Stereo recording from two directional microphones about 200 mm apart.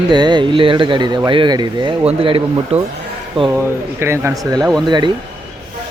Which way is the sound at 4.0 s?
15° right (ahead or behind).